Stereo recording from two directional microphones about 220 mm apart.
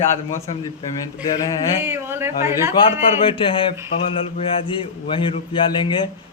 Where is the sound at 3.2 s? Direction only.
25° left (ahead or behind).